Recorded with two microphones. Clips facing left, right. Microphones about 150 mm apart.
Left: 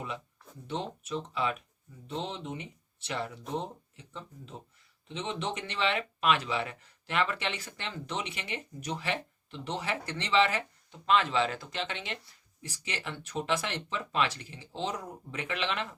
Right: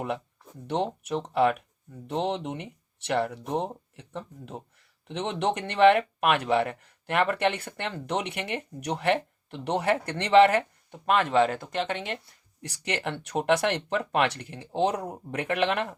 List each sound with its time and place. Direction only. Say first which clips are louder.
0.7 s speech: right 7 dB; 65° right (ahead or behind); by 12.2 s 50° right (ahead or behind)
12.6 s speech: right 8 dB; 70° right (ahead or behind)